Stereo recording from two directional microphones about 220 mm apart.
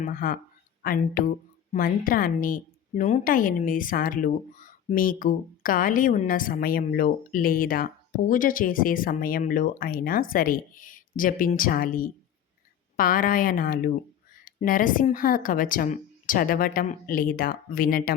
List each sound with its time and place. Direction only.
0.0 s speech: 40° left (ahead or behind)